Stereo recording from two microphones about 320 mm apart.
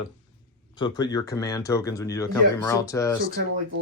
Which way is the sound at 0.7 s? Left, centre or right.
Centre.